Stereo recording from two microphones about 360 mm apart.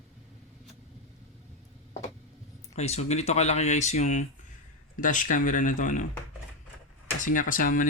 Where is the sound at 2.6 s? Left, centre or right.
Centre.